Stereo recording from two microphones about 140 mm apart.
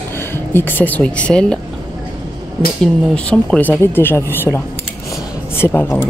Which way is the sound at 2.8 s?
5° left (ahead or behind).